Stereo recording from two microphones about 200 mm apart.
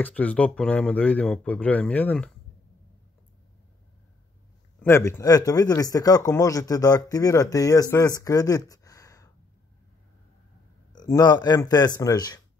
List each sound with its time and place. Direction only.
0.0 s speech: 5° left (ahead or behind)
4.7 s speech: 15° left (ahead or behind)
8.2 s a sound: 15° left (ahead or behind)
10.9 s speech: 20° left (ahead or behind)